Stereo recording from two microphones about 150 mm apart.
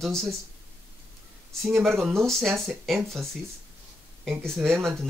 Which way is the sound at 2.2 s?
Centre (ahead or behind).